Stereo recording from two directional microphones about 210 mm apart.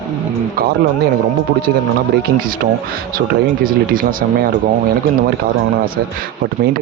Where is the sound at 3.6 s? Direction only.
40° right (ahead or behind).